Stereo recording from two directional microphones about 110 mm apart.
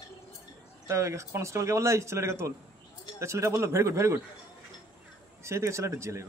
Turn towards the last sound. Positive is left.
turn(degrees=-25)  # may be behind; listen again after turning